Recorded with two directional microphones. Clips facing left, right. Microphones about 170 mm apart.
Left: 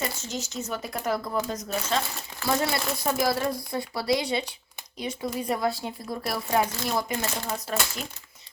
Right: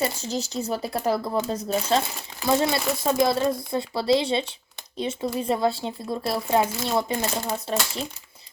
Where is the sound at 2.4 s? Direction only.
20° right (ahead or behind).